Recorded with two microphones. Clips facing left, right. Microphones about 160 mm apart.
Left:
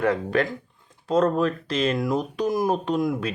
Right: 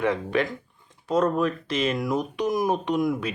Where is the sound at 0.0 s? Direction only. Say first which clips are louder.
Left 2 dB; 40° left (ahead or behind).